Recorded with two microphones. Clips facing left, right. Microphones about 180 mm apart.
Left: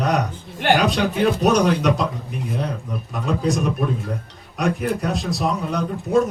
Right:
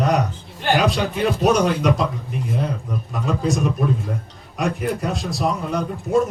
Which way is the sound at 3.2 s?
Centre (ahead or behind).